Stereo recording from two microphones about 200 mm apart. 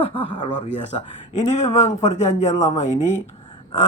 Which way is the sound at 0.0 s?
25° left (ahead or behind).